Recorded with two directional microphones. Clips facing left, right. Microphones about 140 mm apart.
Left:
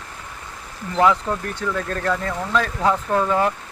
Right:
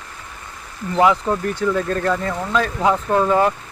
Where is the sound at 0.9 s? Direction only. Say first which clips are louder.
Right 2 dB; 15° right (ahead or behind).